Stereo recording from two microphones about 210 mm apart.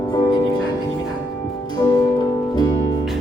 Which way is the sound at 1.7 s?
20° left (ahead or behind).